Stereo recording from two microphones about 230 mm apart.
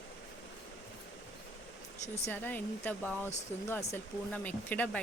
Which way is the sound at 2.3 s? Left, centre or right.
Centre.